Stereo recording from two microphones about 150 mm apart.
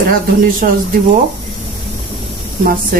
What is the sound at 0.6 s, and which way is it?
Speech, 65° right (ahead or behind).